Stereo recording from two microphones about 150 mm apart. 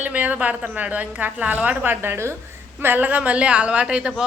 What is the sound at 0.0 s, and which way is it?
A woman's voice, 10° right (ahead or behind).